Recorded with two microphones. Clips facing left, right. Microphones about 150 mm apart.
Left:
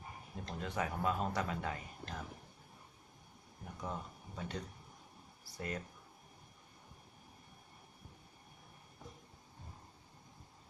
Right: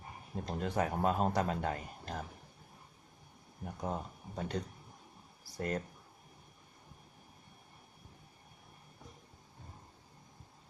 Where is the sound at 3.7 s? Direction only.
45° right (ahead or behind).